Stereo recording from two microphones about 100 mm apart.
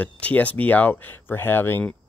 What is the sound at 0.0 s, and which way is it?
Speech, 15° left (ahead or behind).